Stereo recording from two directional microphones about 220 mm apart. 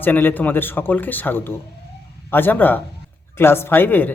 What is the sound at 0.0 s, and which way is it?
A man's voice, 10° left (ahead or behind).